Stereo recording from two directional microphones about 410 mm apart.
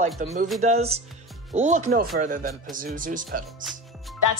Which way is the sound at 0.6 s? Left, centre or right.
Centre.